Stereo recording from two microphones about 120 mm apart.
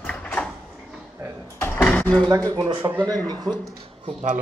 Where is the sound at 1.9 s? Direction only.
10° left (ahead or behind).